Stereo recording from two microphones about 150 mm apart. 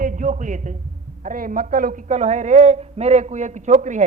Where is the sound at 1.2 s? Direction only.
65° right (ahead or behind).